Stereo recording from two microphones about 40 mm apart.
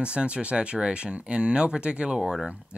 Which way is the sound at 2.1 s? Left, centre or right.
Centre.